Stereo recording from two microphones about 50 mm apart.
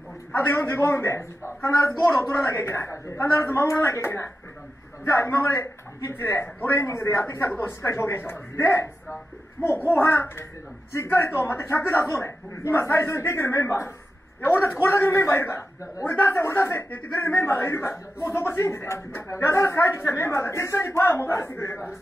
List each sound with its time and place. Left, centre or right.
0.5 s a man's voice: left
1.9 s a man's voice: left
14.4 s a man's voice: left
16.9 s a man's voice: left